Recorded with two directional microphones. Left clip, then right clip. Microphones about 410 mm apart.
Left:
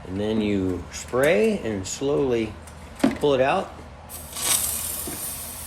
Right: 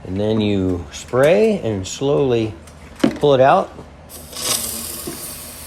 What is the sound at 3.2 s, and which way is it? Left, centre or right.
Speech, centre.